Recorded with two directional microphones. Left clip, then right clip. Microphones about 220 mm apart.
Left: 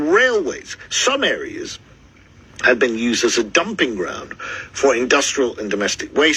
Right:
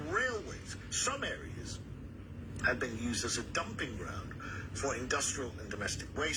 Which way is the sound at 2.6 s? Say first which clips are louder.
Left 18 dB; 40° left (ahead or behind).